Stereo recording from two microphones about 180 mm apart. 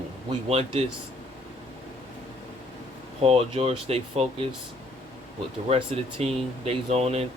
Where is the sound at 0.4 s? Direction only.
35° right (ahead or behind).